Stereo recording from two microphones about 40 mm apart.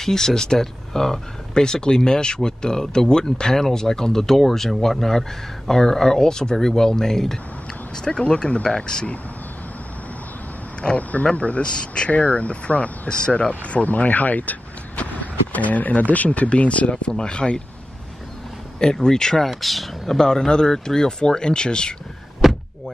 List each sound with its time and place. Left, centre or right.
0.0 s speech: centre; by 8.6 s left
8.6 s speech: centre
11.0 s speech: left
11.6 s speech: left
12.1 s speech: left
16.9 s speech: centre
18.9 s speech: centre
19.5 s speech: centre
20.1 s speech: centre
22.4 s door: centre